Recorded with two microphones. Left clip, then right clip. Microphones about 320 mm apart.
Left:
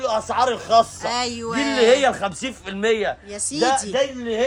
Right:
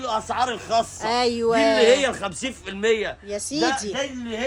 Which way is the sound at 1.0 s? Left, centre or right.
Centre.